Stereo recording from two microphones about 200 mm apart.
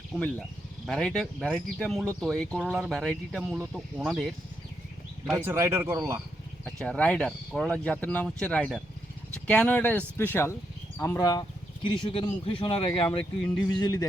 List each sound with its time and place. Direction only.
0.1 s speech: 5° right (ahead or behind)
5.5 s speech: 15° right (ahead or behind)
6.7 s speech: 5° left (ahead or behind)